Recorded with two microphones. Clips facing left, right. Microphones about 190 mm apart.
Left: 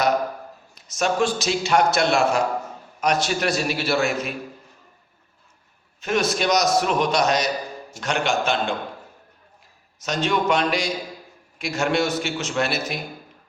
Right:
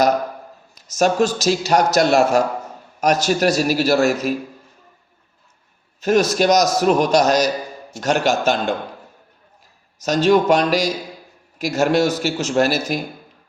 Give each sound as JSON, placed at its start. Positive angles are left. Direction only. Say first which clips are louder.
{"t": 0.9, "sound": "a man's voice", "louder": "right 5 dB", "side_deg": -40}
{"t": 6.0, "sound": "a man's voice", "louder": "right 6 dB", "side_deg": -40}
{"t": 10.0, "sound": "a man's voice", "louder": "right 8 dB", "side_deg": -40}